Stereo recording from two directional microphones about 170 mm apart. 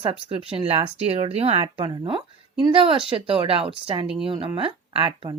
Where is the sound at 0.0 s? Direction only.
35° right (ahead or behind).